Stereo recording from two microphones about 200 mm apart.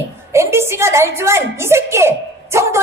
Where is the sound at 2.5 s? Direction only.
15° right (ahead or behind).